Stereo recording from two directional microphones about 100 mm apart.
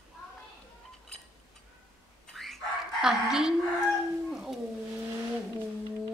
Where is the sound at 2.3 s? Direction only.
Centre (ahead or behind).